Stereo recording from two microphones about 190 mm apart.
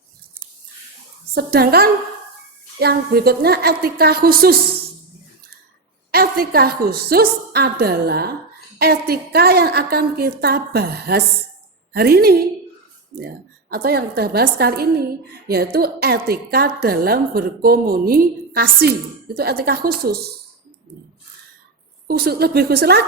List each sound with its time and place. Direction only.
1.3 s a woman's voice: 55° right (ahead or behind)
6.1 s a woman's voice: 55° right (ahead or behind)
22.0 s a woman's voice: 55° right (ahead or behind)